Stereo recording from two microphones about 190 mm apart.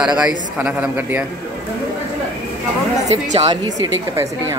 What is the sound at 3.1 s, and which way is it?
Speech, 35° right (ahead or behind).